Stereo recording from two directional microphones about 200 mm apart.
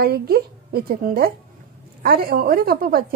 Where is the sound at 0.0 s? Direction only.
50° right (ahead or behind).